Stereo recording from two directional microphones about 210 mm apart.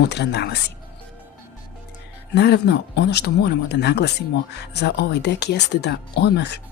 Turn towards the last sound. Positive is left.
turn(degrees=55)  # may be behind; listen again after turning